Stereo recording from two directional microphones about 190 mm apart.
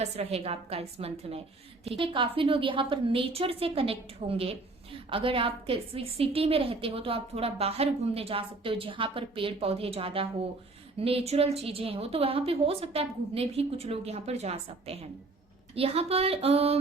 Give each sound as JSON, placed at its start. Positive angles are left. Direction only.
{"t": 0.0, "sound": "a woman's voice", "side_deg": -35}